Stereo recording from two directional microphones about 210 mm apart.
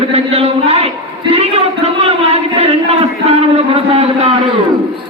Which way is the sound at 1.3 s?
30° right (ahead or behind).